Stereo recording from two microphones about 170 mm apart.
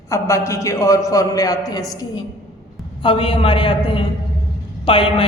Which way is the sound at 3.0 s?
30° left (ahead or behind).